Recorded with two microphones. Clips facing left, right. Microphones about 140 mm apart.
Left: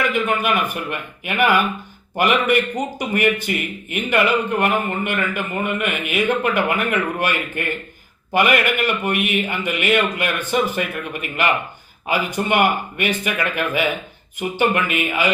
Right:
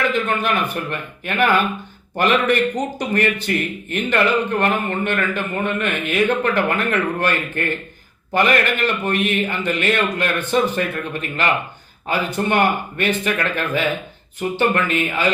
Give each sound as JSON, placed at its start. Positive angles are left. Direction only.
{"t": 0.1, "sound": "a man's voice", "side_deg": 10}